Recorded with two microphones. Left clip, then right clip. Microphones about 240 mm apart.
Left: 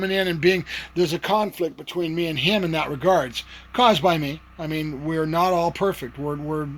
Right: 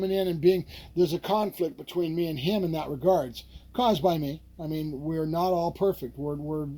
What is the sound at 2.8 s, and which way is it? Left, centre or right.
Speech, left.